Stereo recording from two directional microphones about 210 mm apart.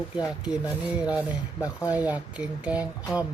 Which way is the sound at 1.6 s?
15° left (ahead or behind).